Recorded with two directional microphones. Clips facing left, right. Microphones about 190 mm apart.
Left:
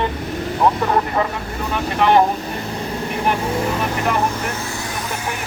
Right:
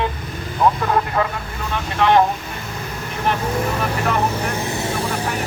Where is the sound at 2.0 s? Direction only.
10° left (ahead or behind).